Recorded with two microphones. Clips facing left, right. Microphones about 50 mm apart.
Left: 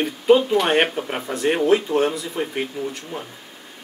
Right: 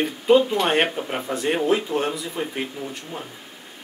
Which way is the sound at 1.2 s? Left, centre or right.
Centre.